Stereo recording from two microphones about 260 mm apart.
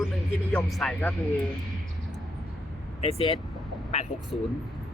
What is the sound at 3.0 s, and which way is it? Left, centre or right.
Speech, left.